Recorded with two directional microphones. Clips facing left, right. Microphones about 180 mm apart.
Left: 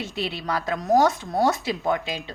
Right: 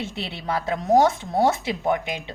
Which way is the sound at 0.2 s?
25° right (ahead or behind).